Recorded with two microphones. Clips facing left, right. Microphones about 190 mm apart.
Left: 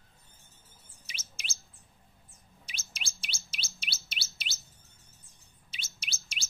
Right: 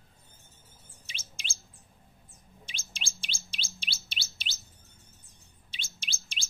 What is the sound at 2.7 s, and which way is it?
Bird, 30° right (ahead or behind).